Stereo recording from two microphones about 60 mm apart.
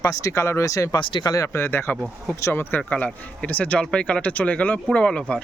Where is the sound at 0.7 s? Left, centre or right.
Left.